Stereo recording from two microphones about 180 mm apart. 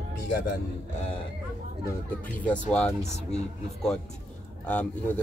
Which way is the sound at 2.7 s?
5° left (ahead or behind).